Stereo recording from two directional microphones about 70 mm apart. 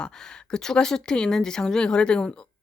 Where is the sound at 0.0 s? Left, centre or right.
Centre.